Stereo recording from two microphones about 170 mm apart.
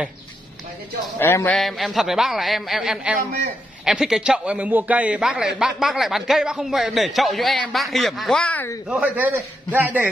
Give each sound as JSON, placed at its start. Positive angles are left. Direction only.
{"t": 1.2, "sound": "speech", "side_deg": 15}
{"t": 1.6, "sound": "a man's voice", "side_deg": 0}
{"t": 8.8, "sound": "a man's voice", "side_deg": -5}